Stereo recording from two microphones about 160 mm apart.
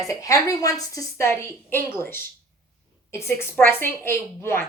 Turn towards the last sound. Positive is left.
turn(degrees=15)  # may be behind; listen again after turning